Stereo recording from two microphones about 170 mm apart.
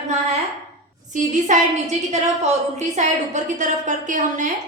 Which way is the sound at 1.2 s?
45° right (ahead or behind).